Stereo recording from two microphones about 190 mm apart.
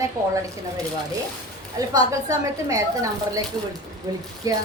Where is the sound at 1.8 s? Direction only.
15° right (ahead or behind).